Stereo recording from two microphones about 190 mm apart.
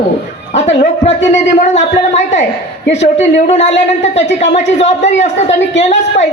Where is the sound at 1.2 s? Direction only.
35° left (ahead or behind).